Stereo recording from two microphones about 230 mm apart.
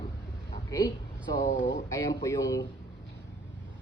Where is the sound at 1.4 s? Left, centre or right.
Left.